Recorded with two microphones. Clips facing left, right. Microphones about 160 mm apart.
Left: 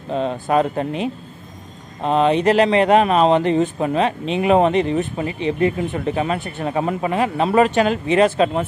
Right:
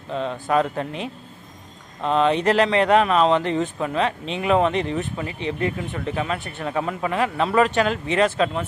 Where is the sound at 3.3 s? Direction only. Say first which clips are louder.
Left 5 dB; 20° left (ahead or behind).